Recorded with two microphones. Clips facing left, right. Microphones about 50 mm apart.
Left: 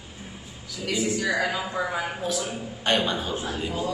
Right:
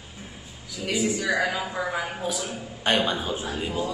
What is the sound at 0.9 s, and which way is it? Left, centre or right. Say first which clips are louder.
Speech: right 1 dB; right.